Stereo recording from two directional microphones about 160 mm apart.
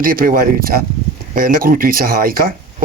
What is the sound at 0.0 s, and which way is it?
Speech, 60° right (ahead or behind).